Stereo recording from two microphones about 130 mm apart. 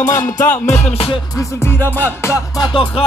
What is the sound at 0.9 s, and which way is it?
Music, 45° left (ahead or behind).